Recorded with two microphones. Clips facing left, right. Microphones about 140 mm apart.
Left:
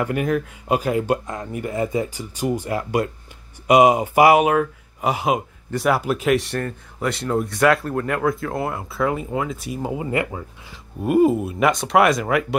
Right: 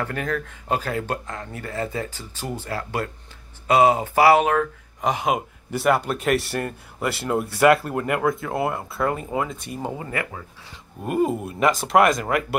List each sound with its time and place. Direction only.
0.0 s speech: 15° left (ahead or behind)
10.2 s speech: 25° left (ahead or behind)
11.1 s speech: 5° left (ahead or behind)